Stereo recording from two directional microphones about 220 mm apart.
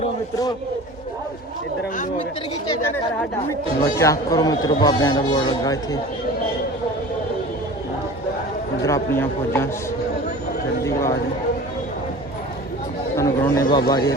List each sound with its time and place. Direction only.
2.6 s speech: 10° left (ahead or behind)
8.8 s speech: 10° left (ahead or behind)
10.8 s speech: 15° left (ahead or behind)
13.1 s speech: 15° left (ahead or behind)